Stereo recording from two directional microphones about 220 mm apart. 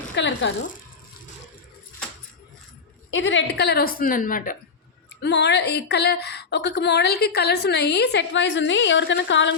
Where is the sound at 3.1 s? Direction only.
55° left (ahead or behind); by 4.5 s 40° left (ahead or behind).